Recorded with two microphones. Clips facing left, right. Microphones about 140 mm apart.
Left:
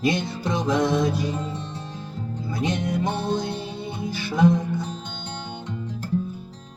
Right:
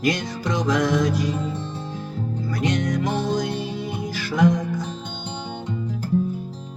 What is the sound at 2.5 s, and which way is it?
Music, 25° left (ahead or behind).